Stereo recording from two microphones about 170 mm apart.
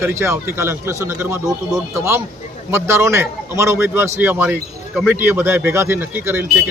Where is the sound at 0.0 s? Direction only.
15° right (ahead or behind).